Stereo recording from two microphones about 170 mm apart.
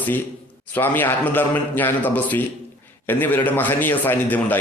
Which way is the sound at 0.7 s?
10° left (ahead or behind).